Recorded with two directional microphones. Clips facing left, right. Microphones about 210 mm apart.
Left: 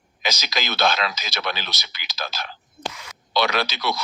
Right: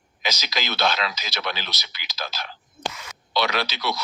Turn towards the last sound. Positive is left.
turn(degrees=50)  # may be behind; listen again after turning